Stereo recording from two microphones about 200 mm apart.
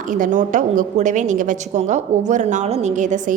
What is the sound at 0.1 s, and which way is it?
A woman's voice, 40° right (ahead or behind).